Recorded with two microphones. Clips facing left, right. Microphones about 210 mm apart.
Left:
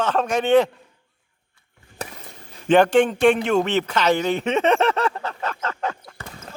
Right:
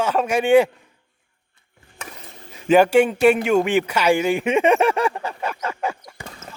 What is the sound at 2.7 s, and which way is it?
A man's voice, 10° right (ahead or behind).